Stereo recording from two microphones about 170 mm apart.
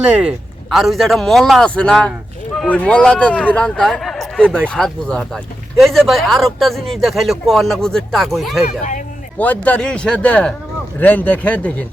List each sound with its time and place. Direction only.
0.0 s speech: 5° right (ahead or behind)
8.6 s speech: 50° left (ahead or behind)
9.4 s speech: 10° left (ahead or behind)